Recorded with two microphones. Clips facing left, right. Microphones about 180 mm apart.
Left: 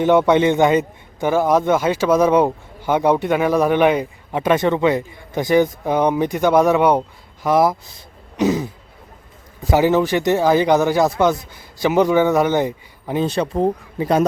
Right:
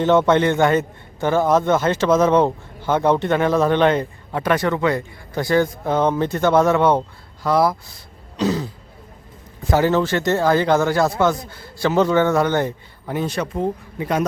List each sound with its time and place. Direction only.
0.0 s a man's voice: 15° left (ahead or behind)
13.2 s speech: 30° left (ahead or behind)